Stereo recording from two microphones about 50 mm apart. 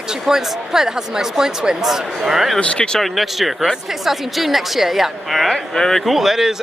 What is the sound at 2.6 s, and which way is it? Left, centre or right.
Speech, centre.